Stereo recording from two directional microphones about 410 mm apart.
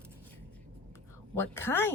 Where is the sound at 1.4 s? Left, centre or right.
Centre.